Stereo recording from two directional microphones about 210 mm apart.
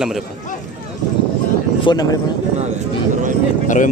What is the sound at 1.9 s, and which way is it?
Speech, 20° left (ahead or behind).